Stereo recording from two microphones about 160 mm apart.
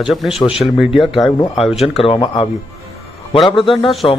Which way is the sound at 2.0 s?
30° left (ahead or behind).